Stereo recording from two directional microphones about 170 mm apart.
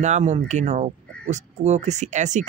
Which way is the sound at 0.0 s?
45° right (ahead or behind).